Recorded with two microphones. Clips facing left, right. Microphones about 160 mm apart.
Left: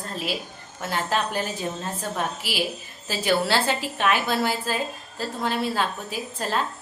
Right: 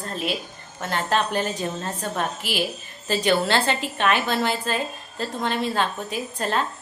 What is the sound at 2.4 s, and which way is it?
Speech, 50° right (ahead or behind).